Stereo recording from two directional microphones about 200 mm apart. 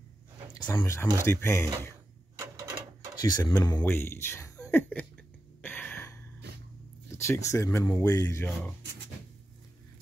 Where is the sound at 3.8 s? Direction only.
10° left (ahead or behind).